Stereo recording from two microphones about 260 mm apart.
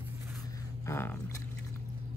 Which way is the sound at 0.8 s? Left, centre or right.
Centre.